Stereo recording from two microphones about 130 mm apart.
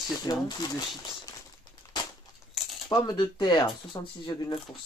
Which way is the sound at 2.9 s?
35° left (ahead or behind).